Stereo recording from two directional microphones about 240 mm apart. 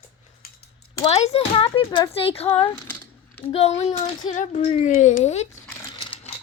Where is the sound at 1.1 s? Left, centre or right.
Left.